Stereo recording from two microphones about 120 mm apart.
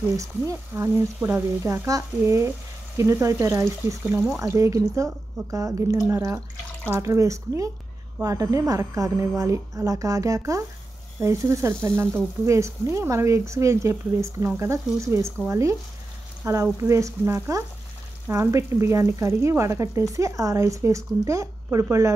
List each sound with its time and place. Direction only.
0.2 s speech: 25° right (ahead or behind)